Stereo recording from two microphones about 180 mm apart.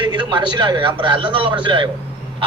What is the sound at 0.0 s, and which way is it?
A man's voice, 25° right (ahead or behind).